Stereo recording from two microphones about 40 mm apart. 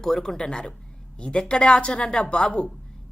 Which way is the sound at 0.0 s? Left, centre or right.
Centre.